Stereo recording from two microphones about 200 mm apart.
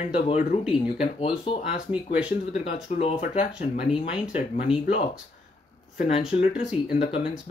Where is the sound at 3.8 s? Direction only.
25° left (ahead or behind).